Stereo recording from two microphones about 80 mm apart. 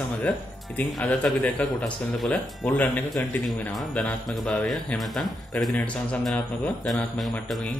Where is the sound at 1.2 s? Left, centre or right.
Centre.